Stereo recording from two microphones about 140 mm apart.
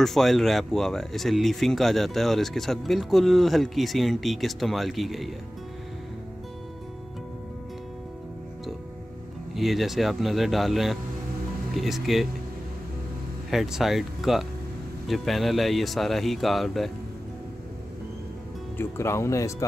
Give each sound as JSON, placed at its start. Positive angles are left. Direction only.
{"t": 0.0, "sound": "speech", "side_deg": 0}
{"t": 9.5, "sound": "speech", "side_deg": 0}
{"t": 13.5, "sound": "speech", "side_deg": 0}
{"t": 18.8, "sound": "speech", "side_deg": 20}